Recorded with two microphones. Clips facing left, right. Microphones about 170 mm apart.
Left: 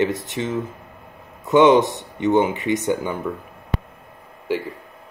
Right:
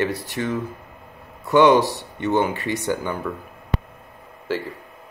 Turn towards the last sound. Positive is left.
turn(degrees=15)  # may be behind; listen again after turning